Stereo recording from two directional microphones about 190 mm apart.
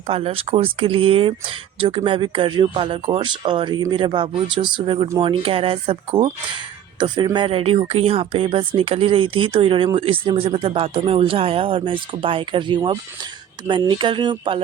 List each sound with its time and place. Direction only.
0.1 s speech: 30° right (ahead or behind)